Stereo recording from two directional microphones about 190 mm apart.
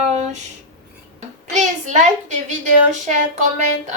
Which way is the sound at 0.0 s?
35° right (ahead or behind).